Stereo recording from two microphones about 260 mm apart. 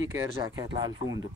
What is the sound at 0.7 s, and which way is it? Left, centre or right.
Speech, centre.